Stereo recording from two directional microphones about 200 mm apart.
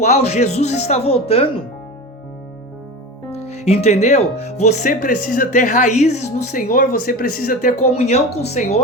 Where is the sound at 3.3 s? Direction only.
35° left (ahead or behind).